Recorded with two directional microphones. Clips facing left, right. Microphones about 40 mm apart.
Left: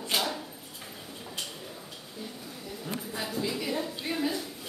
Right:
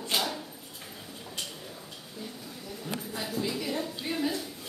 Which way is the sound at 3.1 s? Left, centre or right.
Centre.